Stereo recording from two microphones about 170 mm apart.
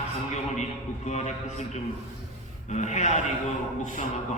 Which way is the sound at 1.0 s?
45° left (ahead or behind).